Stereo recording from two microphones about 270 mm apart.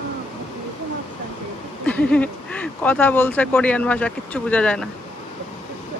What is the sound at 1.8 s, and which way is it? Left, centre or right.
Speech, centre.